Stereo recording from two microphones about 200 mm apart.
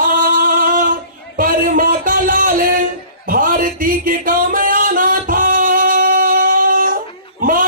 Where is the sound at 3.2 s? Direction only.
45° right (ahead or behind).